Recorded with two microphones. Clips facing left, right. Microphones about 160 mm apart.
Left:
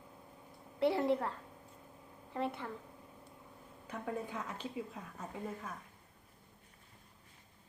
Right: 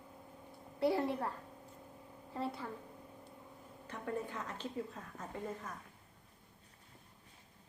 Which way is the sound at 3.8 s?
10° left (ahead or behind).